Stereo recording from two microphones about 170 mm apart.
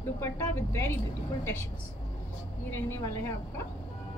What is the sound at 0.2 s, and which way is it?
A woman's voice, 15° left (ahead or behind).